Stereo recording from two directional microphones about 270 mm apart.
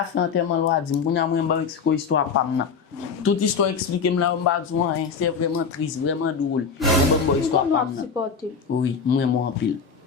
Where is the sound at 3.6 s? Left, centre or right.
Left.